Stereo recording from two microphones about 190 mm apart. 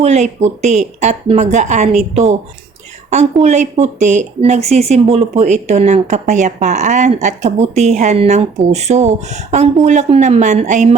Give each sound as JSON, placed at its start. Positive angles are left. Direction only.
{"t": 0.0, "sound": "a woman's voice", "side_deg": -35}
{"t": 3.4, "sound": "a woman's voice", "side_deg": -35}